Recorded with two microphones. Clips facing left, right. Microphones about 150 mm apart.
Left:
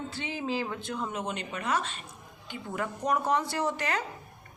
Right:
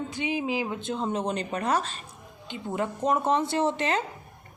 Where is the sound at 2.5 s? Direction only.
25° right (ahead or behind).